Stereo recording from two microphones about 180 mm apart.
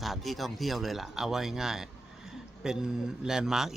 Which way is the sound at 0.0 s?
Centre (ahead or behind).